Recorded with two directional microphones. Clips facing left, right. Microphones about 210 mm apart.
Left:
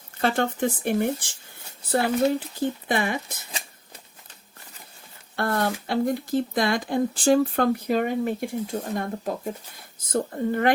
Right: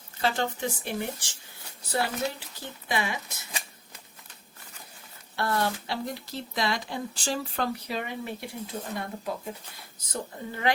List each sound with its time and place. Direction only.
0.2 s speech: 55° left (ahead or behind)
5.4 s speech: 50° left (ahead or behind)